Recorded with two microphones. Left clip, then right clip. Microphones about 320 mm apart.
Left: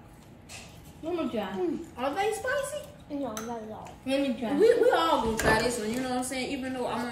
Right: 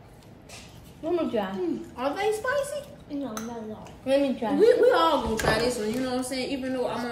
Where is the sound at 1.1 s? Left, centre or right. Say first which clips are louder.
Right 5 dB; centre.